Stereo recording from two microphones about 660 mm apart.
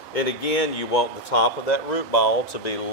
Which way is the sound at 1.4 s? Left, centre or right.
Left.